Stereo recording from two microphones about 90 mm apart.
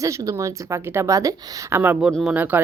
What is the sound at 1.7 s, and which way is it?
Speech, 20° right (ahead or behind).